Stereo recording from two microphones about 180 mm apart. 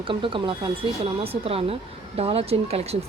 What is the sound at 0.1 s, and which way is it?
Speech, 30° right (ahead or behind).